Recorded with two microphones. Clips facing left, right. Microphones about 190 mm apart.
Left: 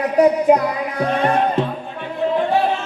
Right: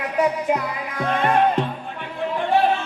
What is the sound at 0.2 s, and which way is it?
Music, 40° left (ahead or behind).